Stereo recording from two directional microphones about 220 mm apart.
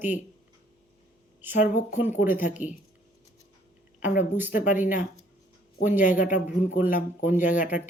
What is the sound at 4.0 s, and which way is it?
Speech, 35° left (ahead or behind).